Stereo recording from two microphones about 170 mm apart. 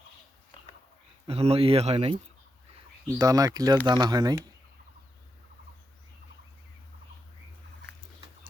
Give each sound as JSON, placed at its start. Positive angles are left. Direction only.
{"t": 1.3, "sound": "speech", "side_deg": -35}
{"t": 3.2, "sound": "speech", "side_deg": -20}